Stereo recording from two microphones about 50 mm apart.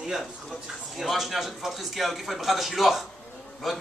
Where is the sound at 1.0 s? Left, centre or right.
Centre.